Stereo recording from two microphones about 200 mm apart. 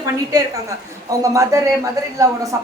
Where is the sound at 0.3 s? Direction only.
15° right (ahead or behind).